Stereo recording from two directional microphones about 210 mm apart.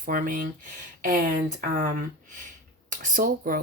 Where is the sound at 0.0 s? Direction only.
40° right (ahead or behind).